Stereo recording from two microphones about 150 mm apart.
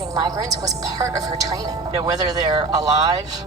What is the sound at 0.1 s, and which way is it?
Speech, 25° right (ahead or behind).